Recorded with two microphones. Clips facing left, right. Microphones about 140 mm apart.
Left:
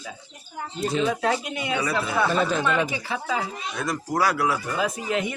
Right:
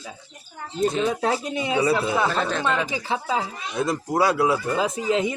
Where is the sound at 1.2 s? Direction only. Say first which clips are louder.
Right 1 dB; 30° right (ahead or behind).